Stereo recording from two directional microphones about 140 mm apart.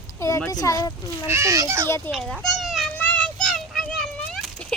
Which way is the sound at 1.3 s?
20° right (ahead or behind).